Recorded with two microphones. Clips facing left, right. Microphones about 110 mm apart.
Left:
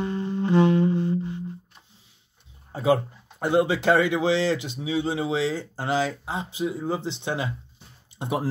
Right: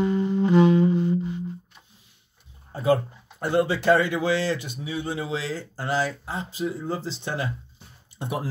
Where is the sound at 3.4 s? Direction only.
20° left (ahead or behind).